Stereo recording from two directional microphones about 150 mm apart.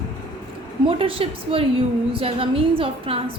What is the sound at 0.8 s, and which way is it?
A woman's voice, 40° right (ahead or behind).